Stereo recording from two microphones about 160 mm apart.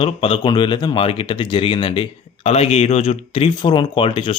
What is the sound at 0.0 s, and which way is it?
Speech, 35° left (ahead or behind).